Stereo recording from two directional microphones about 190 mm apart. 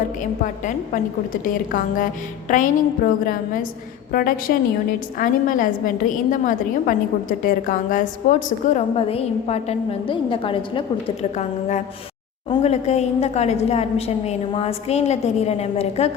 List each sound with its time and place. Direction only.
0.2 s a woman's voice: 40° left (ahead or behind)
9.0 s a woman's voice: 30° left (ahead or behind)